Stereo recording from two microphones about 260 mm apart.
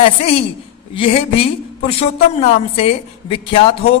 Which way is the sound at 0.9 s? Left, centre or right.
Left.